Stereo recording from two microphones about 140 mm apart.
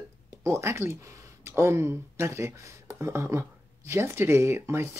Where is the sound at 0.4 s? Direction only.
20° right (ahead or behind).